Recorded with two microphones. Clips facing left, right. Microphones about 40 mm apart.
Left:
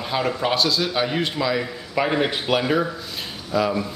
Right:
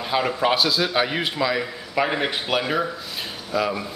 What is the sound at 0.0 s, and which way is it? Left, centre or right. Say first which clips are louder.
Speech: right 1 dB; centre.